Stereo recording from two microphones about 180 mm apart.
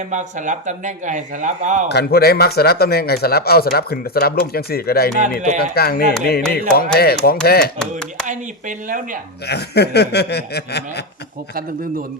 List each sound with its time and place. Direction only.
0.1 s speech: 45° right (ahead or behind)
1.9 s speech: 65° left (ahead or behind)
5.4 s speech: 40° right (ahead or behind)
5.7 s speech: 60° left (ahead or behind)
8.3 s speech: 45° right (ahead or behind)
9.5 s speech: 65° left (ahead or behind)